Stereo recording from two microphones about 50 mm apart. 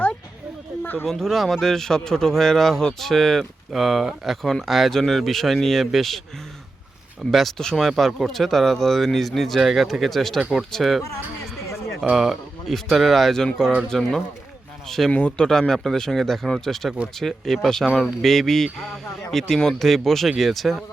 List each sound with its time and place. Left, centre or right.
1.0 s speech: centre
7.3 s speech: centre
7.6 s speech: centre
7.9 s speech: centre
12.1 s speech: centre
15.1 s speech: left
15.4 s speech: centre